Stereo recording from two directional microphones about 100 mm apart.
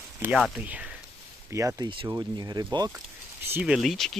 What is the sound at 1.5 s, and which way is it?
Speech, 30° right (ahead or behind).